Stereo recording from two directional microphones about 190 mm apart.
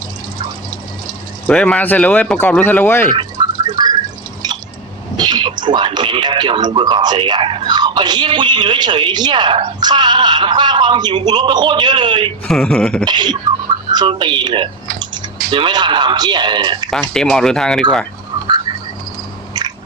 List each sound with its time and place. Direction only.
1.5 s speech: 5° left (ahead or behind)
3.2 s music: 25° right (ahead or behind)
5.1 s speech: 20° right (ahead or behind)
12.5 s speech: 5° left (ahead or behind)
13.1 s speech: 25° right (ahead or behind)
16.9 s speech: 5° left (ahead or behind)
19.6 s a sound: 20° right (ahead or behind)